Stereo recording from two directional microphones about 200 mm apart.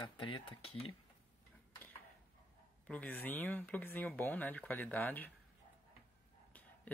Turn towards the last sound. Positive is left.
turn(degrees=10)  # may be behind; listen again after turning